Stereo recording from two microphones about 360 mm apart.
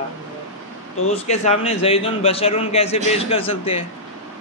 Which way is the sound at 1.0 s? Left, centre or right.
Centre.